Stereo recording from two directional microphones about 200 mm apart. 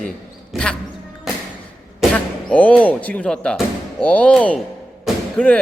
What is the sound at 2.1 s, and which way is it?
Speech, 5° left (ahead or behind).